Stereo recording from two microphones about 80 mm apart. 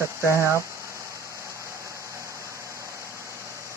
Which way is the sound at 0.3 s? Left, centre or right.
Right.